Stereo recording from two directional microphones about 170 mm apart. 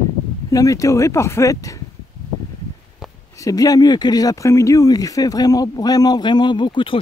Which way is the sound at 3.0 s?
Centre (ahead or behind).